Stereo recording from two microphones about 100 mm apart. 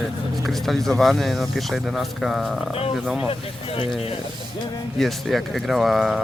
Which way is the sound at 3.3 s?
70° left (ahead or behind).